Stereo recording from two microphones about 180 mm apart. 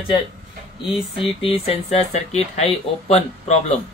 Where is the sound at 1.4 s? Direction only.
35° left (ahead or behind).